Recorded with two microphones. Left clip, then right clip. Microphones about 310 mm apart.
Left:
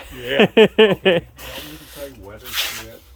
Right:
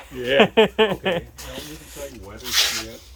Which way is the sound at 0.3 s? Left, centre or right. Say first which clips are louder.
Left 4 dB; left.